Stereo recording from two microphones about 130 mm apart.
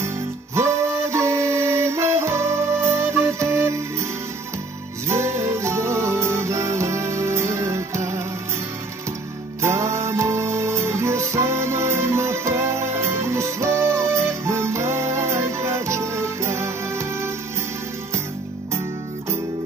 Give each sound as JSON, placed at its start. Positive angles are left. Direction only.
{"t": 0.6, "sound": "music", "side_deg": -20}
{"t": 5.0, "sound": "music", "side_deg": -20}
{"t": 9.6, "sound": "music", "side_deg": -20}